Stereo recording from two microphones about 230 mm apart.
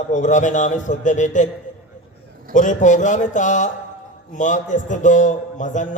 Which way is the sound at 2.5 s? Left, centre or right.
Left.